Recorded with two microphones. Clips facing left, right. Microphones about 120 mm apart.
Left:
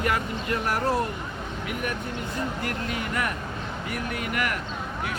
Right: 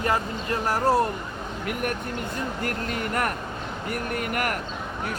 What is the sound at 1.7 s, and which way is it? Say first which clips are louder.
Speech: right 3 dB; 50° right (ahead or behind).